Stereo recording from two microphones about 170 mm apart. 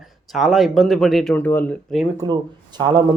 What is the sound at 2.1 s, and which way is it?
Speech, 25° right (ahead or behind).